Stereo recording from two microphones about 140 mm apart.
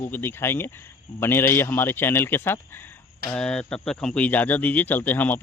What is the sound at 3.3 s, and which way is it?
Speech, 5° left (ahead or behind).